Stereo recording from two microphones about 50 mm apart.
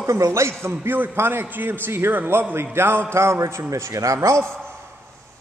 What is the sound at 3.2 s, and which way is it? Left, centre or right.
A man's voice, right.